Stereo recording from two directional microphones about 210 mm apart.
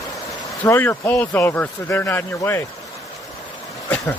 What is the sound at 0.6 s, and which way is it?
Speech, 10° left (ahead or behind).